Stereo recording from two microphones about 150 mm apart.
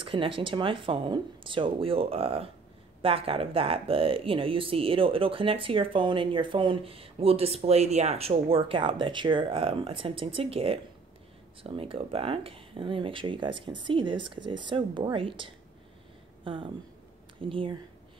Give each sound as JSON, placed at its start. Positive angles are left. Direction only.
{"t": 0.0, "sound": "speech", "side_deg": -35}